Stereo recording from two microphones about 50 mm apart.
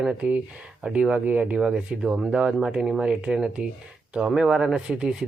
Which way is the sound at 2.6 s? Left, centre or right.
Centre.